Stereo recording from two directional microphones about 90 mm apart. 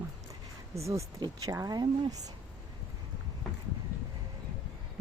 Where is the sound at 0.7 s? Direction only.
35° right (ahead or behind).